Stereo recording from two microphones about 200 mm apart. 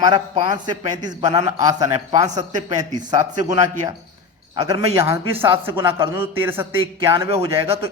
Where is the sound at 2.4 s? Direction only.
35° right (ahead or behind).